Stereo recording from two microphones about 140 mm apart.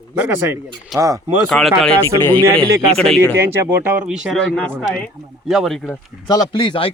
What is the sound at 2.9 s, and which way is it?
Speech, 5° left (ahead or behind).